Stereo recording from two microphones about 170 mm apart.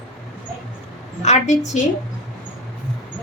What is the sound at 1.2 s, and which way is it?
Speech, 45° left (ahead or behind).